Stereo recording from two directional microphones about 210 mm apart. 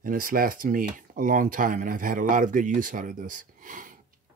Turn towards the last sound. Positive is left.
turn(degrees=-40)  # may be behind; listen again after turning